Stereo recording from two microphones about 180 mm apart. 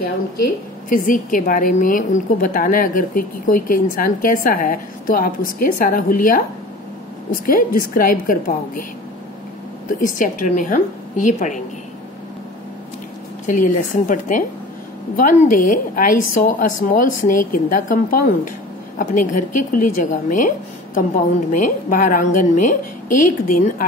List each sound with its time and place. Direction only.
0.8 s a woman's voice: 50° left (ahead or behind)
9.9 s a woman's voice: 50° left (ahead or behind)
13.5 s a woman's voice: 45° left (ahead or behind)